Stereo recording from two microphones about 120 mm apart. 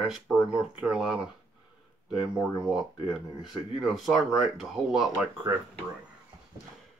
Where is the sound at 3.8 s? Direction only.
Centre (ahead or behind).